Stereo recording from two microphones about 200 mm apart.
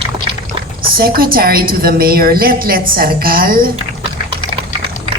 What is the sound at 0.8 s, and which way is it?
A woman's voice, 45° right (ahead or behind).